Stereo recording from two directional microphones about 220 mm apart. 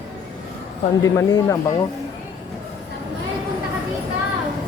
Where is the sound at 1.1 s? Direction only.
15° left (ahead or behind).